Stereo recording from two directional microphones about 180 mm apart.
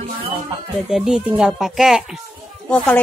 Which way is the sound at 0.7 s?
Centre (ahead or behind).